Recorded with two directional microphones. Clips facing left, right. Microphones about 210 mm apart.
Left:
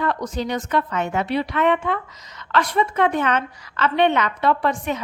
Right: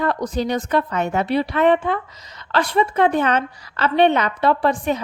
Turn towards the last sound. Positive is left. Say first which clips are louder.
# right 3 dB
turn(degrees=-35)  # may be behind; listen again after turning